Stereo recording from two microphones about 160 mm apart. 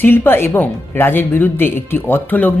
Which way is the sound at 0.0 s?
15° left (ahead or behind).